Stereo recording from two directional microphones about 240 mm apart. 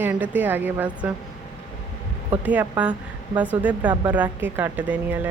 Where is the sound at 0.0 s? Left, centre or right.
Centre.